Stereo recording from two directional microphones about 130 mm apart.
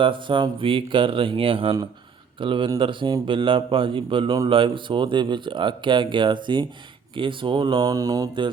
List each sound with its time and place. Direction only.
0.0 s speech: 40° right (ahead or behind)